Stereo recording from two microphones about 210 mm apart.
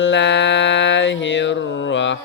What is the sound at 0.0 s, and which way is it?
Mantra, 60° left (ahead or behind).